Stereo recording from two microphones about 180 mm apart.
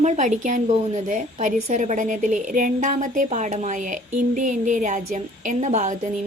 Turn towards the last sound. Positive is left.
turn(degrees=-40)  # may be behind; listen again after turning